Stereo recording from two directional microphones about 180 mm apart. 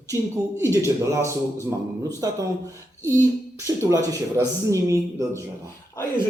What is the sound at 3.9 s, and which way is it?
Speech, 20° right (ahead or behind).